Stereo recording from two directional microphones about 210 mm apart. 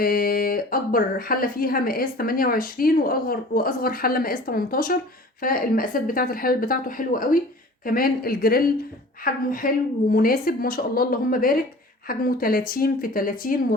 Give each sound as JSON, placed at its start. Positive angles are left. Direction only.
{"t": 0.0, "sound": "speech", "side_deg": 45}